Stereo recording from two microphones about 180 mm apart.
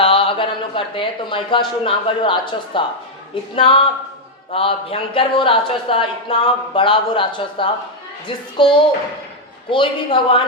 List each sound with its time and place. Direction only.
0.0 s speech: 30° left (ahead or behind)